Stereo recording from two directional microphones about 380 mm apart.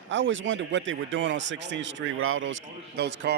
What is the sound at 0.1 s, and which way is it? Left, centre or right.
Speech, right.